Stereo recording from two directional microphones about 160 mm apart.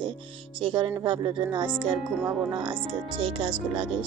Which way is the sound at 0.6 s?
35° right (ahead or behind).